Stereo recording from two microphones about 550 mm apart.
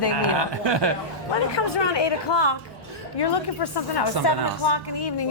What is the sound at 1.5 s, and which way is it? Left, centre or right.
A woman's voice, left.